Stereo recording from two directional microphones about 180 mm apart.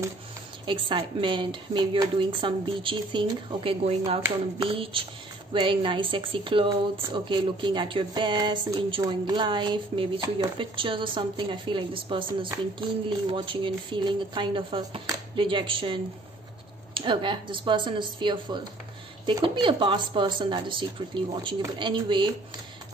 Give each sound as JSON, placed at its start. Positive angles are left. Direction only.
{"t": 0.7, "sound": "speech", "side_deg": -25}